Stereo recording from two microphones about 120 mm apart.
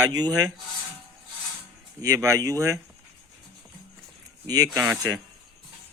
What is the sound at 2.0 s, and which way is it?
Speech, 25° right (ahead or behind).